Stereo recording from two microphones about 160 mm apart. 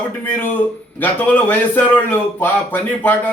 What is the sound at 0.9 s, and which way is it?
A man's voice, 10° left (ahead or behind).